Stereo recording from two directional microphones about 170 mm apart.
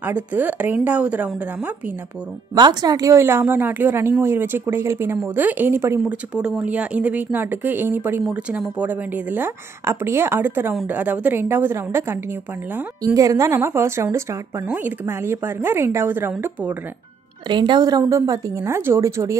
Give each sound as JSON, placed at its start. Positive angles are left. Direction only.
{"t": 0.0, "sound": "speech", "side_deg": -10}
{"t": 2.5, "sound": "speech", "side_deg": -25}
{"t": 17.5, "sound": "speech", "side_deg": -25}